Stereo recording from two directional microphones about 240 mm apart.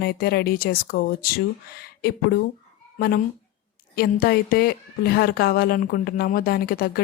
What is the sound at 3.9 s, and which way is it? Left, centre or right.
A woman's voice, left.